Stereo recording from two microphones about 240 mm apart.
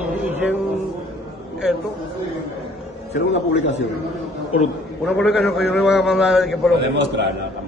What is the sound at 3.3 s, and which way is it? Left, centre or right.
Speech, left.